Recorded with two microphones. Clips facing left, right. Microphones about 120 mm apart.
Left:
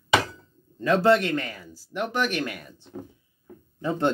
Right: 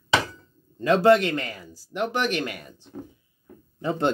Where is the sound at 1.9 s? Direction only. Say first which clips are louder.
Right 1 dB; 15° right (ahead or behind).